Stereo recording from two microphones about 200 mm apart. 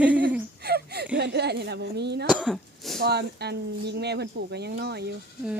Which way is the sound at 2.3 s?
Centre (ahead or behind).